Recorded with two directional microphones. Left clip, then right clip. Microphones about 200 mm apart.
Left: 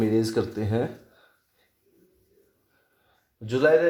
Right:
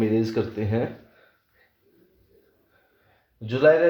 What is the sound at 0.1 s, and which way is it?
Speech, 35° left (ahead or behind).